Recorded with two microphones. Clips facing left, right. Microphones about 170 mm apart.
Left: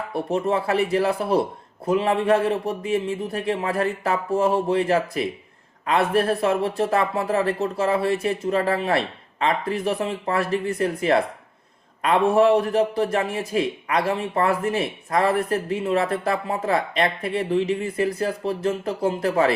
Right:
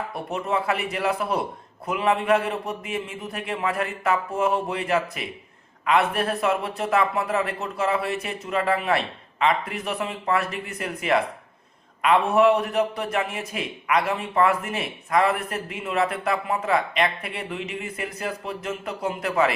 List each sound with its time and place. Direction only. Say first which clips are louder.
0.1 s a man's voice: left 7 dB; 30° left (ahead or behind)